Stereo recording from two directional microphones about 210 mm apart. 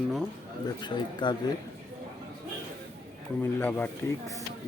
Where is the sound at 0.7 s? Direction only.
20° left (ahead or behind).